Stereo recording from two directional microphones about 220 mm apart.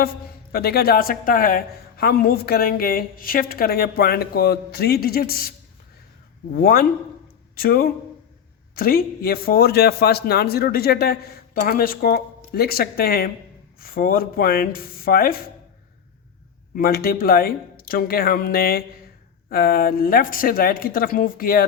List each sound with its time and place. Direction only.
0.5 s speech: 45° left (ahead or behind)
16.7 s speech: 40° left (ahead or behind)